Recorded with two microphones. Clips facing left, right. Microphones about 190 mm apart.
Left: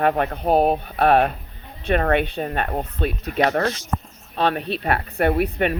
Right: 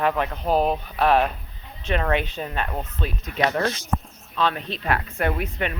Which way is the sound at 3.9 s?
Centre (ahead or behind).